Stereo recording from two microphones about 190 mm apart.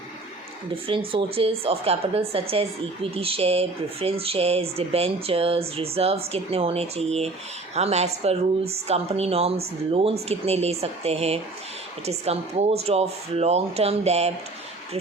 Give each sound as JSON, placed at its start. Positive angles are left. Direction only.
{"t": 0.9, "sound": "a woman's voice", "side_deg": -30}